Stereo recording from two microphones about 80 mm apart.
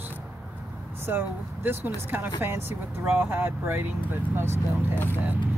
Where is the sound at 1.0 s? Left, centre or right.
Right.